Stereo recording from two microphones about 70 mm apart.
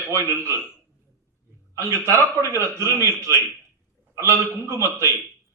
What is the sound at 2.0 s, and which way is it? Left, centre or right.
A man's voice, right.